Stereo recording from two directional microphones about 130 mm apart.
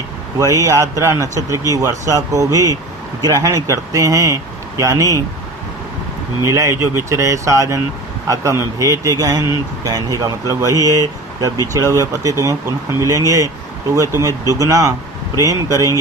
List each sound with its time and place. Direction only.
0.3 s a man's voice: 25° right (ahead or behind)
6.4 s a man's voice: 25° right (ahead or behind)